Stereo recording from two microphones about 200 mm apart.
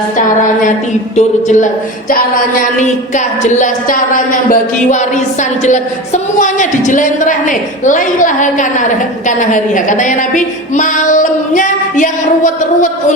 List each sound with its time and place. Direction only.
1.1 s a woman's voice: 35° left (ahead or behind)